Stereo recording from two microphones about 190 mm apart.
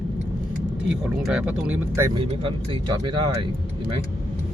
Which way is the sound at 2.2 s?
30° right (ahead or behind).